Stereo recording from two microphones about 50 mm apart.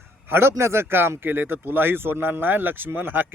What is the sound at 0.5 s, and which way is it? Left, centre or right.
Speech, right.